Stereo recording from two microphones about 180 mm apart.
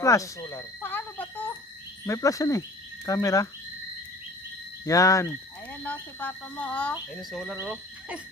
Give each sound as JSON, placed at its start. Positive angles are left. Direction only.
{"t": 0.0, "sound": "speech", "side_deg": 20}
{"t": 4.8, "sound": "speech", "side_deg": 20}